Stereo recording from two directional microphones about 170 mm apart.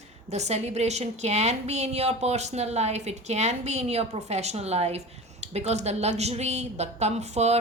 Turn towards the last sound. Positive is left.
turn(degrees=-40)  # may be behind; listen again after turning